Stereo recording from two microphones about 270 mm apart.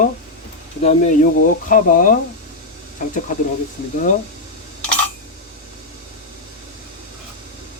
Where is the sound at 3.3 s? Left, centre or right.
Left.